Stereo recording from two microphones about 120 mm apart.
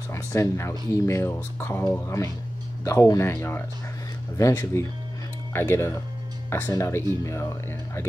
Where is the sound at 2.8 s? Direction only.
25° left (ahead or behind).